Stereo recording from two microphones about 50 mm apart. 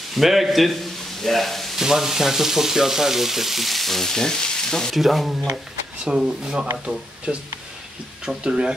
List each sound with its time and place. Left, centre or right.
0.1 s frying: centre
1.2 s speech: centre
1.8 s frying: centre
4.9 s frying: centre
6.0 s speech: centre